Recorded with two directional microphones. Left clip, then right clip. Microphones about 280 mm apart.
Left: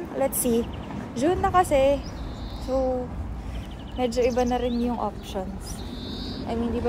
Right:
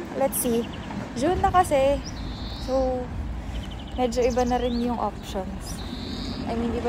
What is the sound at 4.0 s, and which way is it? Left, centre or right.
Speech, centre.